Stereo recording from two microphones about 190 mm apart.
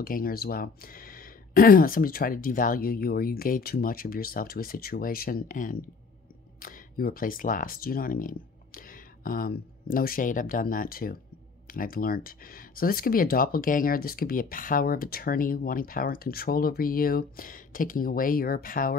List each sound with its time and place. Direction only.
0.0 s speech: 50° left (ahead or behind)